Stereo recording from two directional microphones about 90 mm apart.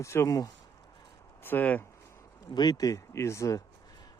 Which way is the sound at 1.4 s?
20° left (ahead or behind).